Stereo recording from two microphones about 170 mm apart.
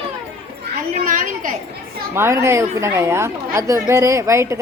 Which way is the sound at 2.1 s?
15° right (ahead or behind).